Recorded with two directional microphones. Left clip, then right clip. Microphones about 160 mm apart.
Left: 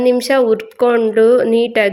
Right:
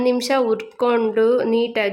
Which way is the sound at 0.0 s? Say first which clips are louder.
Left 6 dB; 15° left (ahead or behind).